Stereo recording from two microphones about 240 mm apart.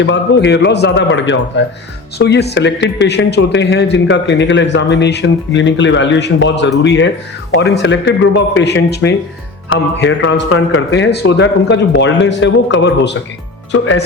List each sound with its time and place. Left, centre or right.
0.0 s speech: left